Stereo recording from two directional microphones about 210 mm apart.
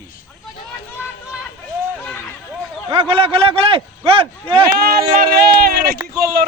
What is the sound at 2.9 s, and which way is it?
A man's voice, 25° right (ahead or behind).